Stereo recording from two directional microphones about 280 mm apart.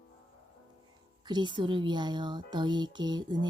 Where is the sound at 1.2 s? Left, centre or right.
Centre.